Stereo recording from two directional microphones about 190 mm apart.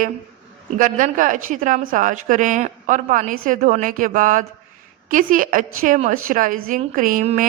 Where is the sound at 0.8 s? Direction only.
45° right (ahead or behind).